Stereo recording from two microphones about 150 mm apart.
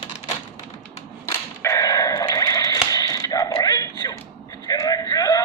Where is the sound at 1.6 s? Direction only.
20° left (ahead or behind).